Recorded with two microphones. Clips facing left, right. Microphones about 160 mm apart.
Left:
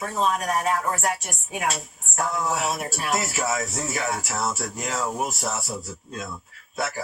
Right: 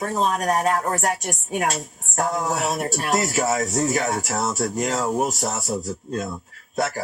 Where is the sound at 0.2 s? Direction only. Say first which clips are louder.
Right 2 dB; 40° right (ahead or behind).